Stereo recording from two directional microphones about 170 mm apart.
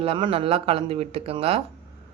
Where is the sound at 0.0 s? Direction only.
30° right (ahead or behind).